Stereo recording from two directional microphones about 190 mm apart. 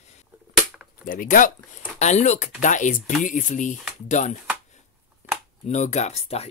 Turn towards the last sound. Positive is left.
turn(degrees=35)  # may be behind; listen again after turning